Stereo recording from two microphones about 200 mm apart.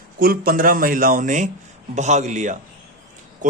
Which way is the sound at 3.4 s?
40° right (ahead or behind).